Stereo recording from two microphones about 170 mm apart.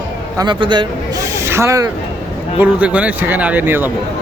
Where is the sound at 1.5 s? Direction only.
15° right (ahead or behind).